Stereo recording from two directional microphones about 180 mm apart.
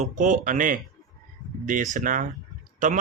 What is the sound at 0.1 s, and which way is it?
Speech, 45° right (ahead or behind).